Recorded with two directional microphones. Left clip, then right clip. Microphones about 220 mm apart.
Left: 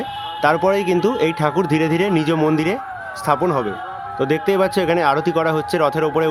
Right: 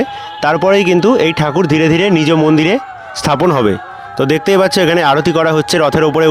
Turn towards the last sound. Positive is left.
turn(degrees=-35)  # may be behind; listen again after turning